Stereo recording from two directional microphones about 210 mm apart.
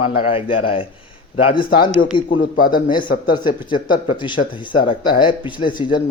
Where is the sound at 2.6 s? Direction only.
45° left (ahead or behind).